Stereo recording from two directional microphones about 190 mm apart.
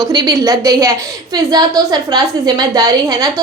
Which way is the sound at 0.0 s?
20° right (ahead or behind).